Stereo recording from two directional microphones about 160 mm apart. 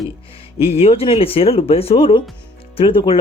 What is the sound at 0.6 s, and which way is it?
Speech, 40° left (ahead or behind).